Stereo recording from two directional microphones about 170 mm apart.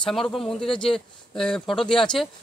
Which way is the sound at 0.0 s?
Centre (ahead or behind).